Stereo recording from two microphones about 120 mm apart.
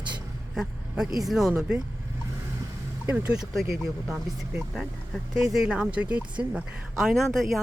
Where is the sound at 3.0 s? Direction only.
15° right (ahead or behind).